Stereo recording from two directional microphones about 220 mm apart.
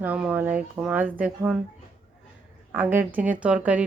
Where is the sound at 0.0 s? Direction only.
5° right (ahead or behind).